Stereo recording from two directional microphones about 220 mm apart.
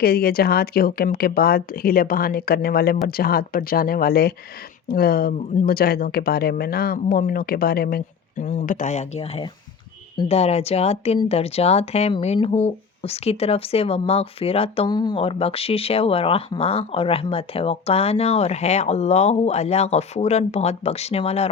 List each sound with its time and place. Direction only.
0.0 s a woman's voice: 45° left (ahead or behind); by 21.5 s 30° left (ahead or behind)